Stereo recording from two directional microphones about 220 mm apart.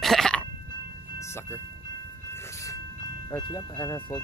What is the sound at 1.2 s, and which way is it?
Speech, 10° left (ahead or behind).